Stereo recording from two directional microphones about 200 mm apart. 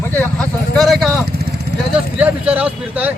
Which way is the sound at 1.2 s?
55° right (ahead or behind).